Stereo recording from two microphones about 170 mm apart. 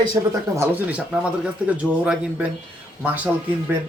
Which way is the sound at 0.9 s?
5° right (ahead or behind).